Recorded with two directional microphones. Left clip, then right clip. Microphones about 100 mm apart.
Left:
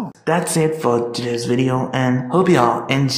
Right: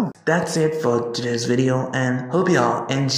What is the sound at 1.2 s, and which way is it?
Speech, 25° right (ahead or behind).